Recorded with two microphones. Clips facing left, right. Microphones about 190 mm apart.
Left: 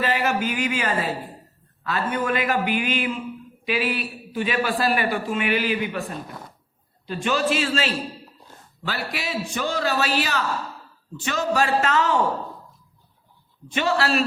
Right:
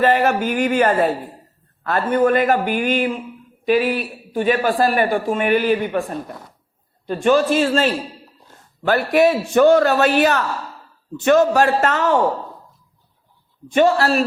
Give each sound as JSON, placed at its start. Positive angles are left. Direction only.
{"t": 0.0, "sound": "a man's voice", "side_deg": -50}
{"t": 7.1, "sound": "a man's voice", "side_deg": -50}
{"t": 13.7, "sound": "a man's voice", "side_deg": -50}